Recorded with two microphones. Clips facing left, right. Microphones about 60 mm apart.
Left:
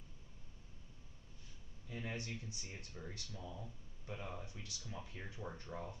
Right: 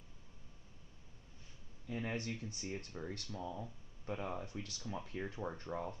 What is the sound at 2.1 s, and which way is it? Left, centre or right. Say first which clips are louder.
Speech: right 5 dB; right.